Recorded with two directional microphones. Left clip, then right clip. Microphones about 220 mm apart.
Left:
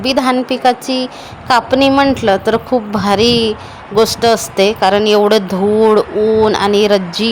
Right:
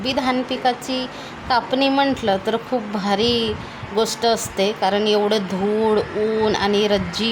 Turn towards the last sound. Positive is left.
turn(degrees=20)  # may be behind; listen again after turning